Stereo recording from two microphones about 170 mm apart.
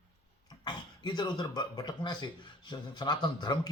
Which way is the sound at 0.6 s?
25° left (ahead or behind).